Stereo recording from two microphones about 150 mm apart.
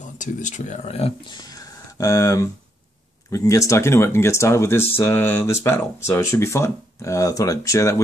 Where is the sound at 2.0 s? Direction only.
20° left (ahead or behind).